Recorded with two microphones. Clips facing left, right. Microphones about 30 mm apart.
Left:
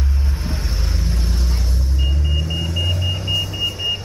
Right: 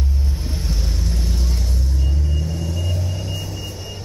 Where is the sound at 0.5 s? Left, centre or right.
Left.